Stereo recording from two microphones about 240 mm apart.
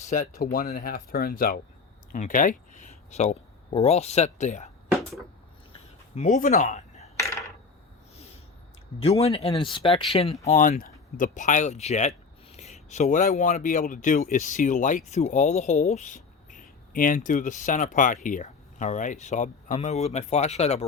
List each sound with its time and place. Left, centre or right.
0.0 s speech: left
6.1 s speech: left
9.0 s speech: left